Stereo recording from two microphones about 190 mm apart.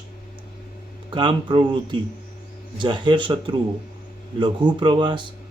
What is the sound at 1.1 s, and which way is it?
Speech, 25° right (ahead or behind).